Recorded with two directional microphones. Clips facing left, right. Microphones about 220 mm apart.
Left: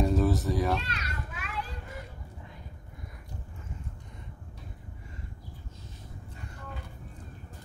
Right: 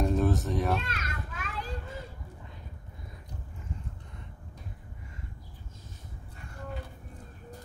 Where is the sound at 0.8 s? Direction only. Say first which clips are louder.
Right 1 dB; 45° right (ahead or behind).